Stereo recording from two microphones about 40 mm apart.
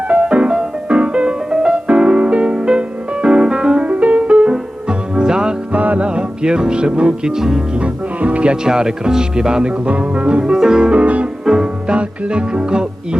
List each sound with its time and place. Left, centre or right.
0.1 s music: right
3.8 s music: right; by 5.5 s centre
5.7 s music: right
6.1 s music: right
7.8 s speech: right
8.6 s speech: centre
9.8 s music: right
10.4 s speech: centre
10.9 s music: right
11.4 s music: centre
11.9 s music: right